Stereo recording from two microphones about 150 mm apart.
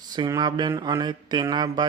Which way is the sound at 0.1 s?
25° right (ahead or behind).